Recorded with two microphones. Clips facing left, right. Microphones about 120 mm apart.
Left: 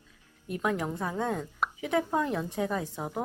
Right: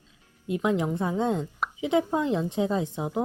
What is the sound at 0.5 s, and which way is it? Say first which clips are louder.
A woman's voice: right 5 dB; 15° right (ahead or behind).